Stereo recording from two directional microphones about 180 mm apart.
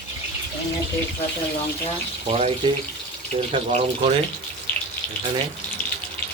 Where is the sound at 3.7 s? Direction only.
35° right (ahead or behind).